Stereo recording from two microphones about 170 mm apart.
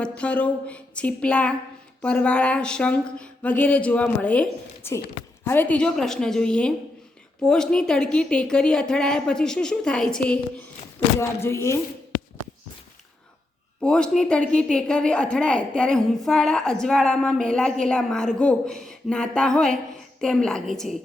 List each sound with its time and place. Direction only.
0.0 s speech: 5° left (ahead or behind)
5.5 s a woman's voice: 10° left (ahead or behind)
11.2 s speech: 15° left (ahead or behind)
13.8 s a woman's voice: 5° left (ahead or behind)